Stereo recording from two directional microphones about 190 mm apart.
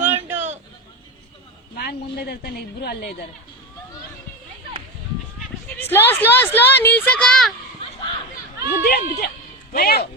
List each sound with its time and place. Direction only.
0.0 s a sound: 10° right (ahead or behind)
1.7 s a woman's voice: 55° left (ahead or behind)
5.6 s a woman's voice: 10° left (ahead or behind)
8.7 s a woman's voice: 55° left (ahead or behind)